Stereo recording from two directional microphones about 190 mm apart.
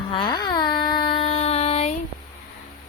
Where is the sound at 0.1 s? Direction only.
25° left (ahead or behind).